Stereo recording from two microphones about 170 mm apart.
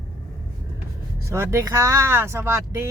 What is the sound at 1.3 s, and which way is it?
Speech, 15° right (ahead or behind).